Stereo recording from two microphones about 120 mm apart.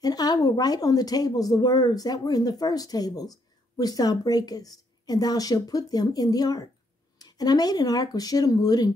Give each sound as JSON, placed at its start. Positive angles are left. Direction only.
{"t": 0.0, "sound": "speech", "side_deg": 35}